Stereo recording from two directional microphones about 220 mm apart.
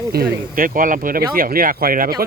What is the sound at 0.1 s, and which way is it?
Speech, 40° right (ahead or behind).